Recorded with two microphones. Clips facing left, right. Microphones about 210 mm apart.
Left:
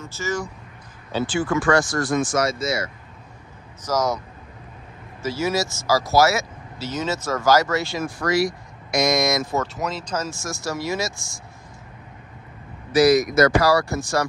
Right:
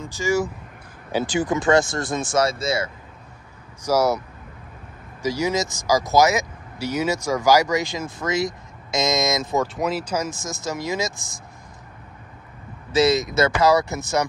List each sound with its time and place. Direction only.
0.0 s speech: 15° right (ahead or behind); by 2.9 s 30° right (ahead or behind)
3.8 s speech: 10° right (ahead or behind)
5.2 s speech: 15° right (ahead or behind)
9.8 s speech: 5° right (ahead or behind)
12.9 s speech: 25° right (ahead or behind)